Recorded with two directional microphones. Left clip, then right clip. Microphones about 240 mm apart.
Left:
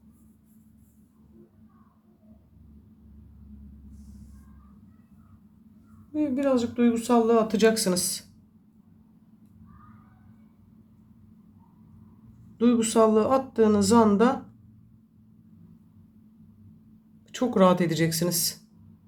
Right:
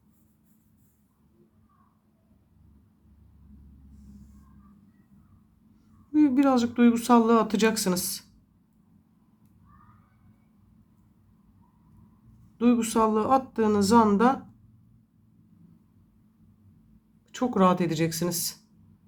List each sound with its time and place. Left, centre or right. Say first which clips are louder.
6.1 s speech: right 3 dB; right; by 8.2 s centre
12.5 s speech: left 2 dB; centre
17.3 s speech: left 2 dB; centre